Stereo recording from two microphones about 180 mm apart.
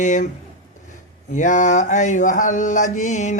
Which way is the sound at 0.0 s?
45° left (ahead or behind).